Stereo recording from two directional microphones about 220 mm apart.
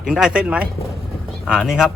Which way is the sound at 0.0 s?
5° right (ahead or behind).